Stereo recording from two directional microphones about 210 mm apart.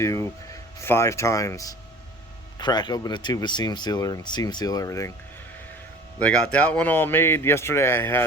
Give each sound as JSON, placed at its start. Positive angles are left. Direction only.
{"t": 0.0, "sound": "a man's voice", "side_deg": 15}
{"t": 6.1, "sound": "a man's voice", "side_deg": 5}